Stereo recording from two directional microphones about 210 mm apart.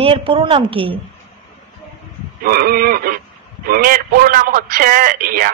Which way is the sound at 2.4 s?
45° right (ahead or behind).